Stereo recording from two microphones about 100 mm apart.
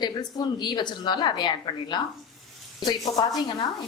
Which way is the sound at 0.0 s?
45° left (ahead or behind).